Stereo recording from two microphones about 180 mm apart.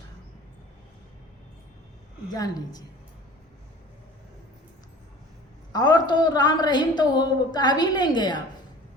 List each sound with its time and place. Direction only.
2.3 s a woman's voice: 20° left (ahead or behind)
5.7 s a woman's voice: 25° left (ahead or behind)